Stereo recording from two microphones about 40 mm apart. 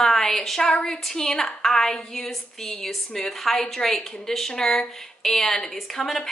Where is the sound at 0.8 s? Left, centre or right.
Centre.